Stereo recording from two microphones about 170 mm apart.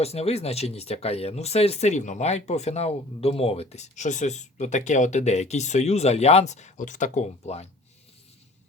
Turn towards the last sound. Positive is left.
turn(degrees=40)  # may be behind; listen again after turning